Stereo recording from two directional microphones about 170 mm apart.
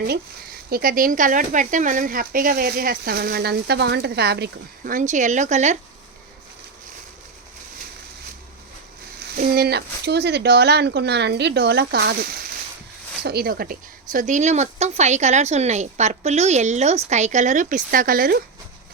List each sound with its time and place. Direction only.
0.7 s speech: 60° right (ahead or behind)
9.2 s speech: 60° right (ahead or behind)